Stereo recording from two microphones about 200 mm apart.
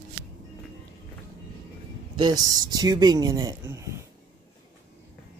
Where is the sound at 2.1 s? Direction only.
20° right (ahead or behind).